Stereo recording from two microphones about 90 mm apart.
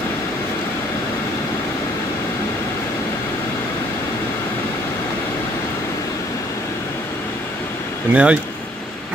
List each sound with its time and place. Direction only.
8.1 s speech: 15° right (ahead or behind)